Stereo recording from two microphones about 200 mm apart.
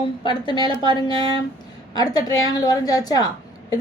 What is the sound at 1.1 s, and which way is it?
Speech, 30° right (ahead or behind).